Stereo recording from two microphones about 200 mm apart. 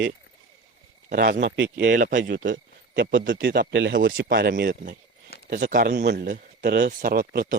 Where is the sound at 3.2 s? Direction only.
45° right (ahead or behind).